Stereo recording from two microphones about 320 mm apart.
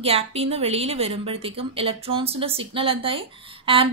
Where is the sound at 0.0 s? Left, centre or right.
Centre.